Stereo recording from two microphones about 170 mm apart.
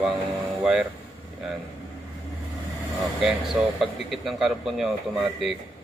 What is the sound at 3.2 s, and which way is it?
A man's voice, centre (ahead or behind).